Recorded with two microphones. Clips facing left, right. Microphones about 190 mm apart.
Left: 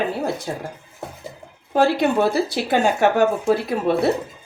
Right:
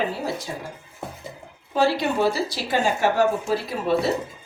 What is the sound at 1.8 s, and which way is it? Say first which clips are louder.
A woman's voice: left 4 dB; 55° left (ahead or behind).